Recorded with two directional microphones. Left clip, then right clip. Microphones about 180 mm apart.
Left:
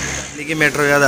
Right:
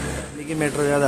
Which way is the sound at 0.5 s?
5° left (ahead or behind).